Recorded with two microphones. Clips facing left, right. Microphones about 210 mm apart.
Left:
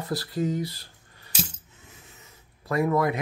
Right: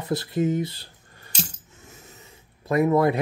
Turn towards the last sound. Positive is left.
turn(degrees=-25)  # may be behind; listen again after turning